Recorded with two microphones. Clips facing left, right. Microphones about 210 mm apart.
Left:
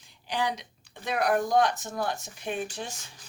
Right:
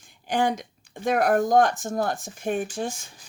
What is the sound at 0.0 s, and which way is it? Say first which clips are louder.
Speech: right 6 dB; 50° right (ahead or behind).